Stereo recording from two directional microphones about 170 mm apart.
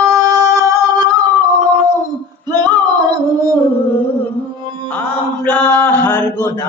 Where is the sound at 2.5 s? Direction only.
25° right (ahead or behind).